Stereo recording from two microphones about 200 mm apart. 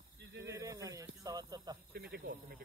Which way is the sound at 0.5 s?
15° right (ahead or behind).